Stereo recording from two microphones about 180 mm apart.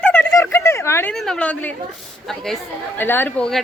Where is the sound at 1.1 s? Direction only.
5° left (ahead or behind).